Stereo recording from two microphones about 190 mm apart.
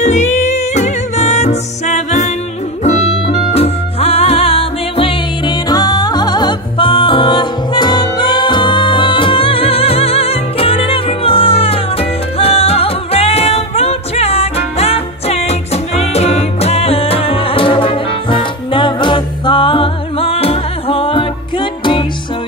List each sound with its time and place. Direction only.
0.0 s music: 40° left (ahead or behind)